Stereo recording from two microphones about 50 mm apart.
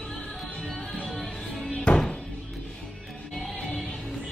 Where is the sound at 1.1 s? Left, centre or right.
Centre.